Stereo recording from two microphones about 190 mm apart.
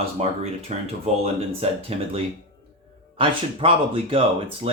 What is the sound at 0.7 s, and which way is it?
Speech, 40° right (ahead or behind).